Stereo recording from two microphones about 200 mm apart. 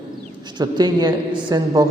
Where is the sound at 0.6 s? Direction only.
20° right (ahead or behind).